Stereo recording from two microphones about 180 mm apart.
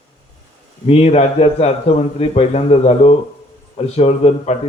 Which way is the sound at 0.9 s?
35° left (ahead or behind).